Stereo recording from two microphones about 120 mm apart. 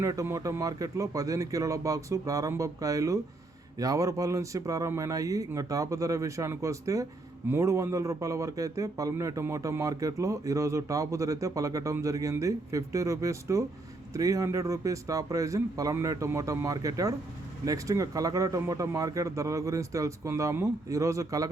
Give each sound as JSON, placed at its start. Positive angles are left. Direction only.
{"t": 0.0, "sound": "speech", "side_deg": -25}